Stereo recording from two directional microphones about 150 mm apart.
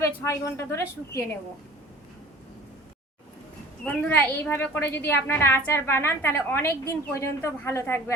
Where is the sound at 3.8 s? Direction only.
10° left (ahead or behind).